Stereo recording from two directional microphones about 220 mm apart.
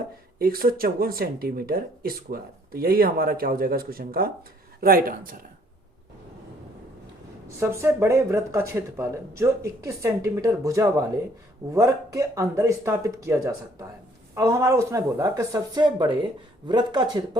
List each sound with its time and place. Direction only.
0.3 s speech: 40° right (ahead or behind)
7.4 s speech: 10° right (ahead or behind)